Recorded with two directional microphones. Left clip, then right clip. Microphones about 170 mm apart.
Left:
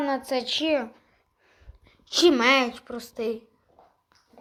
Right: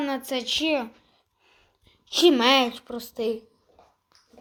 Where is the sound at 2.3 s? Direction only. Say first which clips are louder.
Right 1 dB; 15° right (ahead or behind).